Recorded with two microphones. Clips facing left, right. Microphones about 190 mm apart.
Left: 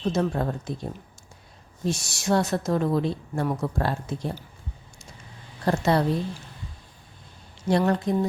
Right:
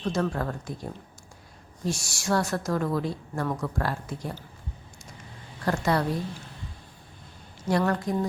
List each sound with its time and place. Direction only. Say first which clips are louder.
0.0 s a woman's voice: left 3 dB; 20° left (ahead or behind)
5.6 s a woman's voice: left 3 dB; 25° left (ahead or behind)
7.7 s a woman's voice: left 3 dB; 25° left (ahead or behind)